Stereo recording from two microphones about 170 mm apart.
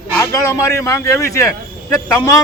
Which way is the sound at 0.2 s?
15° left (ahead or behind).